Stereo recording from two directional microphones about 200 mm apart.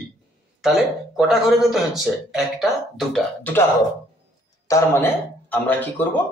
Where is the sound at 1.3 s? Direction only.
Centre (ahead or behind).